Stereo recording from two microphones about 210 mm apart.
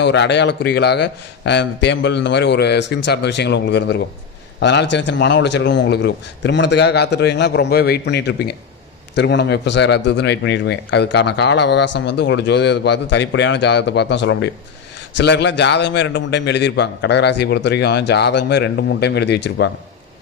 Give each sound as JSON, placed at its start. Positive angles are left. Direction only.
{"t": 0.0, "sound": "a man's voice", "side_deg": 55}